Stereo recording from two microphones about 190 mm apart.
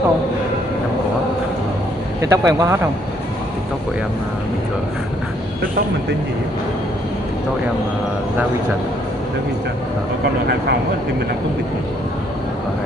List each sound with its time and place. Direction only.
2.2 s speech: 15° right (ahead or behind)